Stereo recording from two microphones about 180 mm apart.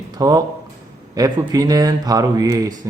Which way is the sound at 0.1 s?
20° right (ahead or behind).